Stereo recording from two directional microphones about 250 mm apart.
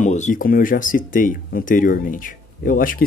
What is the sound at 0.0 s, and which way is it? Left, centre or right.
Speech, left.